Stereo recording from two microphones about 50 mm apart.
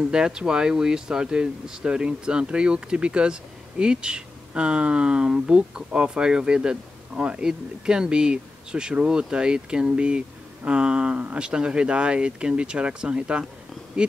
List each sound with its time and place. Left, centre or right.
0.0 s speech: centre